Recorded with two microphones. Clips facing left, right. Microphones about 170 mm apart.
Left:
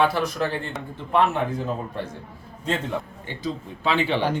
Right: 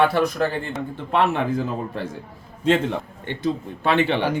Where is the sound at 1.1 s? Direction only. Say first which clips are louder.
Right 1 dB; 90° right.